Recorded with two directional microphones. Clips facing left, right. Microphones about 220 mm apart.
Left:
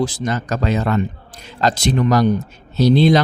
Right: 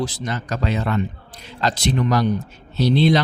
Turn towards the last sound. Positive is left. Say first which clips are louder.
# left 4 dB
turn(degrees=45)  # may be behind; listen again after turning